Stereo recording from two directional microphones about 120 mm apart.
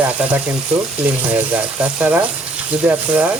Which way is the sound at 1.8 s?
15° right (ahead or behind).